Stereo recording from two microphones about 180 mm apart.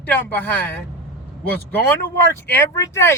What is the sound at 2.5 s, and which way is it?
Speech, 15° left (ahead or behind).